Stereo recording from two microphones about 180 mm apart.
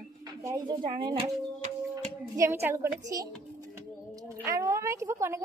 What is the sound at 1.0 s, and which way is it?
Speech, 25° right (ahead or behind).